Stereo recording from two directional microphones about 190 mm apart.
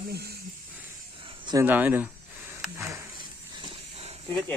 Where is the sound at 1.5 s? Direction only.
10° right (ahead or behind).